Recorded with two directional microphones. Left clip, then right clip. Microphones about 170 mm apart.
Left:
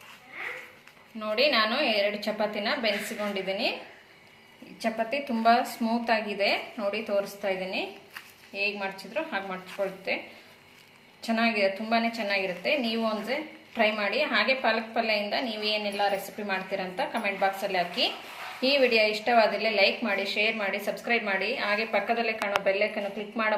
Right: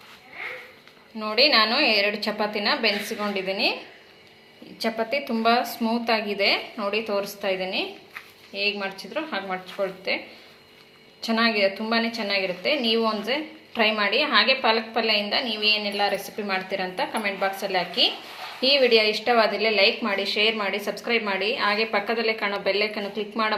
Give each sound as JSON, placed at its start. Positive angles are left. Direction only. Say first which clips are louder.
{"t": 1.2, "sound": "a woman's voice", "louder": "right 5 dB", "side_deg": -40}
{"t": 4.8, "sound": "a woman's voice", "louder": "right 3 dB", "side_deg": -30}
{"t": 11.2, "sound": "a woman's voice", "louder": "right 4 dB", "side_deg": -35}